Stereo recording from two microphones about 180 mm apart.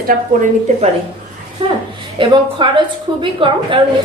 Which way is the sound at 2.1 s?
30° right (ahead or behind).